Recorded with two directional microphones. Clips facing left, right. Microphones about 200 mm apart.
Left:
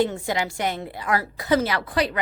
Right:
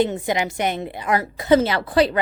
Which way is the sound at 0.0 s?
20° right (ahead or behind).